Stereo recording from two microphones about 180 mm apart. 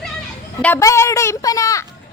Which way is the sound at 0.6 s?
15° left (ahead or behind).